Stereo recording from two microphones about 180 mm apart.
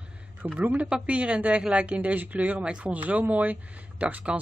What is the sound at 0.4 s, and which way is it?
Speech, 10° right (ahead or behind).